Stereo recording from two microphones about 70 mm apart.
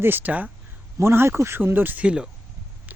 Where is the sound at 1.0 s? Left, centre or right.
Right; by 2.2 s centre.